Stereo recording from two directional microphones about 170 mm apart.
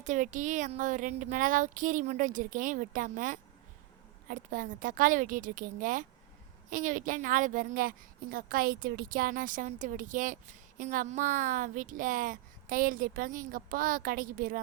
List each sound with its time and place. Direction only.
0.0 s speech: 45° right (ahead or behind)